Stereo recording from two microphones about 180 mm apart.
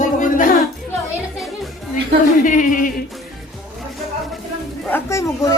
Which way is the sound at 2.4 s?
45° left (ahead or behind).